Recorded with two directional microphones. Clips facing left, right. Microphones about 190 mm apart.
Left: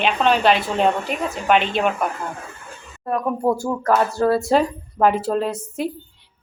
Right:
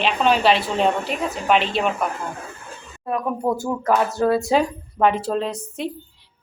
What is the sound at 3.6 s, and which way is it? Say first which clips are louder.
Speech: left 1 dB; 20° right (ahead or behind).